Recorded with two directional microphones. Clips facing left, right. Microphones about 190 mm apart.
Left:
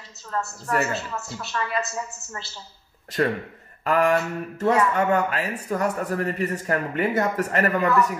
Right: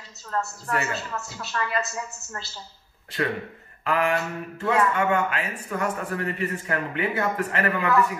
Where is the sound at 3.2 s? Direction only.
40° left (ahead or behind).